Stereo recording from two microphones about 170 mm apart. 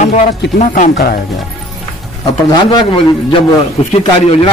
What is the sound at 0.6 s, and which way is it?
Speech, 45° left (ahead or behind).